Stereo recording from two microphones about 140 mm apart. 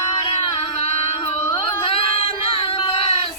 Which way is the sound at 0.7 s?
50° left (ahead or behind).